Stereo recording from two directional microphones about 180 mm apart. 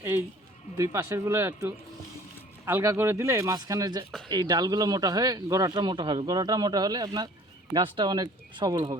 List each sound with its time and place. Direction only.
0.8 s speech: 15° right (ahead or behind)